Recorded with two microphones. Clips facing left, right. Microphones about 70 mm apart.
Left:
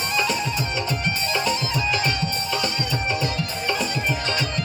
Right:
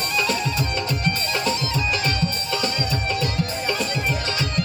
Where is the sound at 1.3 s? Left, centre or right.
Left.